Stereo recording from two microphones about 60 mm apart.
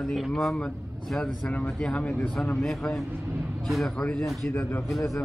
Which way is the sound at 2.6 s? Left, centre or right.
Centre.